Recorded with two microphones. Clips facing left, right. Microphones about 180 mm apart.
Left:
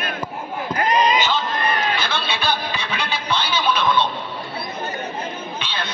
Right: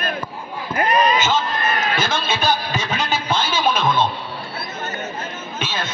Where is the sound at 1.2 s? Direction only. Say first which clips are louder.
Right 1 dB; 45° right (ahead or behind).